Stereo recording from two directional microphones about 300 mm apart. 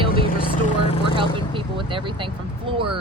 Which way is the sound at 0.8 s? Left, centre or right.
Centre.